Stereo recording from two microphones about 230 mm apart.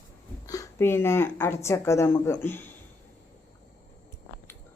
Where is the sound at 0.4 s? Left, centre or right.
Centre.